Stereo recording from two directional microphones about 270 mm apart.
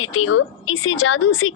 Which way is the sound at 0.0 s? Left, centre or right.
Left.